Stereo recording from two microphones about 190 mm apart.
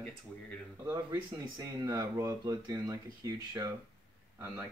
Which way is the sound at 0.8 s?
15° right (ahead or behind).